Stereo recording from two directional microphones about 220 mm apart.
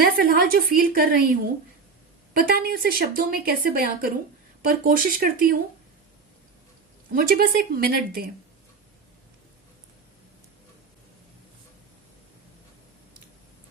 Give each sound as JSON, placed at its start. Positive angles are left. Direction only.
{"t": 0.0, "sound": "a woman's voice", "side_deg": -45}
{"t": 7.1, "sound": "a woman's voice", "side_deg": -40}